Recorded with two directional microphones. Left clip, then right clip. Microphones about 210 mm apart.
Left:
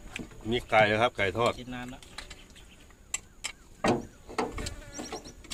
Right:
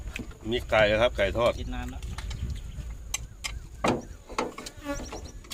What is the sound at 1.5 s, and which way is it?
Speech, 25° left (ahead or behind).